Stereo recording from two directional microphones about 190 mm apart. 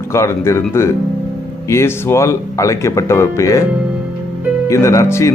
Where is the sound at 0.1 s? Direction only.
15° left (ahead or behind).